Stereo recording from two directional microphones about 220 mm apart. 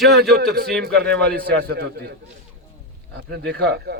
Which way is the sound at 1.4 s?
45° right (ahead or behind).